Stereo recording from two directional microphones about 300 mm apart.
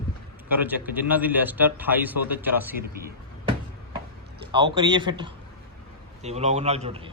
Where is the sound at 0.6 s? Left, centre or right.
Centre.